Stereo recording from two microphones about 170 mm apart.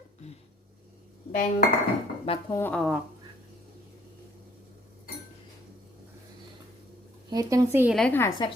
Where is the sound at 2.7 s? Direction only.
Centre (ahead or behind).